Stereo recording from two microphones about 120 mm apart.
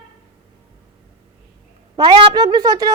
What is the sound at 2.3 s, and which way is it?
Speech, 30° right (ahead or behind).